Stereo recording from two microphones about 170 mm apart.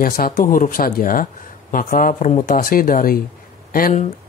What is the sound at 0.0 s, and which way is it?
A man's voice, 55° left (ahead or behind).